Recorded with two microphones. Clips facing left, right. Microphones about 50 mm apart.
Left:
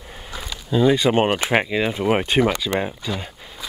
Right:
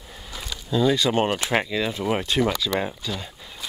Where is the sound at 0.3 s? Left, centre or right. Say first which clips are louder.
Left 2 dB; centre.